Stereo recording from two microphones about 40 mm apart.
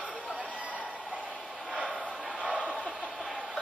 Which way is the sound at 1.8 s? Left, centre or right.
Centre.